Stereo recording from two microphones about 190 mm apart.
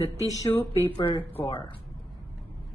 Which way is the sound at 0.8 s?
25° left (ahead or behind).